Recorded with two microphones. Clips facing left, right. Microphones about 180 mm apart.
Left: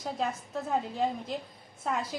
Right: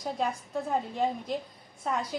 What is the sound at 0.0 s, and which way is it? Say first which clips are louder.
A woman's voice: right 1 dB; centre (ahead or behind).